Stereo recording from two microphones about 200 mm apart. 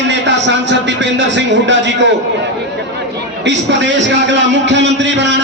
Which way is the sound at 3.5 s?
65° right (ahead or behind).